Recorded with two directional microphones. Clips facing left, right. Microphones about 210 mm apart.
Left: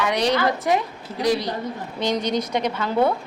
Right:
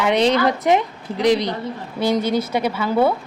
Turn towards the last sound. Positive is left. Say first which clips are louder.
# right 3 dB
turn(degrees=-5)  # may be behind; listen again after turning